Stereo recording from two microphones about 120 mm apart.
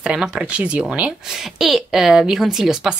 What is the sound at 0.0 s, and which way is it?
Speech, 5° right (ahead or behind).